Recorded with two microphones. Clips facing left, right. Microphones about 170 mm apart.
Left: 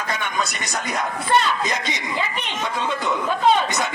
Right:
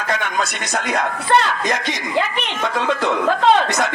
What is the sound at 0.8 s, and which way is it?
A woman's voice, 75° right (ahead or behind).